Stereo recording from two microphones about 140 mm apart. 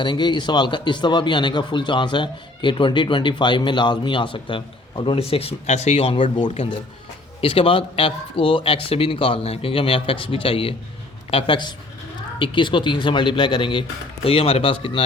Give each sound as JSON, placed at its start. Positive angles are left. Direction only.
{"t": 0.0, "sound": "speech", "side_deg": 35}